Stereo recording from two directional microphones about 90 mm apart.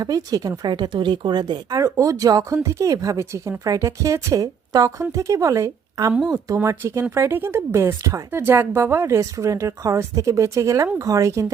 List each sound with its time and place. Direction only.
0.0 s speech: 45° right (ahead or behind)
0.7 s speech: 60° right (ahead or behind); by 11.5 s 35° right (ahead or behind)